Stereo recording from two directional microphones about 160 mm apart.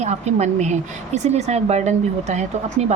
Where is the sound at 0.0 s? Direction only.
45° right (ahead or behind).